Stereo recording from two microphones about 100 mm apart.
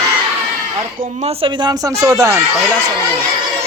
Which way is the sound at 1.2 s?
70° right (ahead or behind).